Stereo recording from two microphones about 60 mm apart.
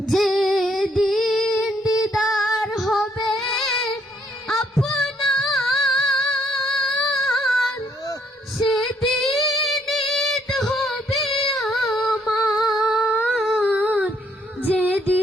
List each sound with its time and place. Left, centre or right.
0.1 s female singing: centre
1.5 s child singing: centre
4.7 s music: centre
8.7 s female singing: centre
11.1 s music: centre
12.5 s female singing: centre
13.3 s a sound: centre
13.7 s a sound: right
14.8 s female singing: right